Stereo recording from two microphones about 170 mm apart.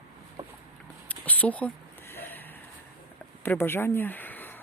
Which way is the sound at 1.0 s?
10° left (ahead or behind).